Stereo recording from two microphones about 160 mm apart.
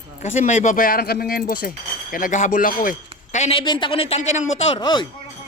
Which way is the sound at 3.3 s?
45° left (ahead or behind).